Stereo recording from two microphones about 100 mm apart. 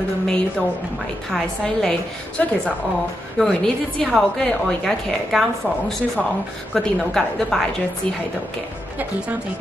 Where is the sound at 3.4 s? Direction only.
5° left (ahead or behind).